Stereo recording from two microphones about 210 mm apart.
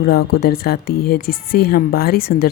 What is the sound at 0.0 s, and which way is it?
A woman's voice, 45° left (ahead or behind).